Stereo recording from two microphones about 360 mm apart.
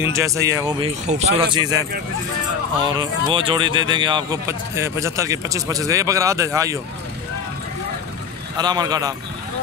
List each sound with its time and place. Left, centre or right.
0.1 s speech: centre
2.8 s speech: centre
8.5 s speech: centre